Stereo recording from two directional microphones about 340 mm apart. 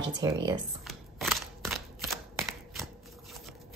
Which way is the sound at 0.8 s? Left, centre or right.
Centre.